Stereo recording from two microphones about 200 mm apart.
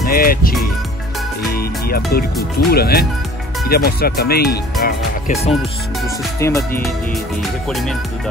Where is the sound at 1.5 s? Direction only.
50° left (ahead or behind).